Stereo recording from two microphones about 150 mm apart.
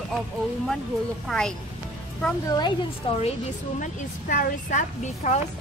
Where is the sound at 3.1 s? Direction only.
35° left (ahead or behind).